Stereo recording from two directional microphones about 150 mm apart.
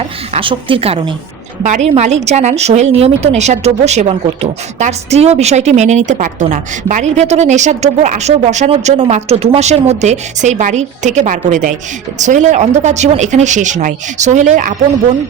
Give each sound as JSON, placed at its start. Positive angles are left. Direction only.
{"t": 0.3, "sound": "speech", "side_deg": -35}
{"t": 1.6, "sound": "a woman's voice", "side_deg": -50}